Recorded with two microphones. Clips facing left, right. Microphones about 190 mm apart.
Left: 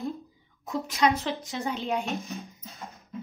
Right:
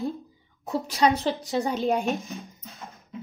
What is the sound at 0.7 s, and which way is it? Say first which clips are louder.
A woman's voice: right 2 dB; 35° right (ahead or behind).